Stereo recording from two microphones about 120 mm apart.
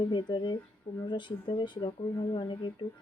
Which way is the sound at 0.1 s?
40° left (ahead or behind).